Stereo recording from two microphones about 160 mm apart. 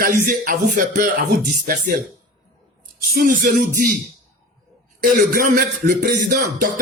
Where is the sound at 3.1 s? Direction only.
65° right (ahead or behind).